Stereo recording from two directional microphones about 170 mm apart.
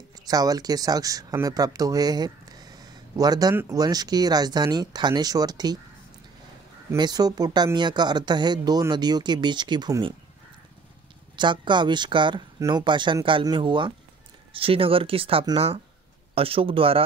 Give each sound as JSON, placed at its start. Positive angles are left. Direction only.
{"t": 0.3, "sound": "speech", "side_deg": -20}
{"t": 6.9, "sound": "speech", "side_deg": -25}
{"t": 11.3, "sound": "speech", "side_deg": -30}